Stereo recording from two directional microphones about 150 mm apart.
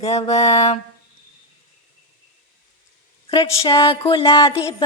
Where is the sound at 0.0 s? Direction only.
45° left (ahead or behind).